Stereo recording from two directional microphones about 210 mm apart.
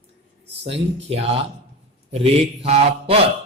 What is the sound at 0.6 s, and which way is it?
Speech, 30° right (ahead or behind).